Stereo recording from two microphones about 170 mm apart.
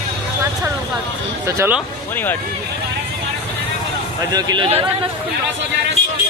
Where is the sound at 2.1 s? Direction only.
10° left (ahead or behind).